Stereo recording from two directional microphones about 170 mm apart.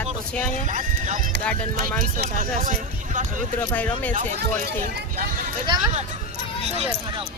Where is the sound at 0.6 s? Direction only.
50° right (ahead or behind).